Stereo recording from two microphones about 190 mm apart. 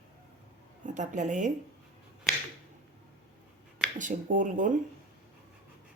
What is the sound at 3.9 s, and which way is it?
Speech, 40° right (ahead or behind).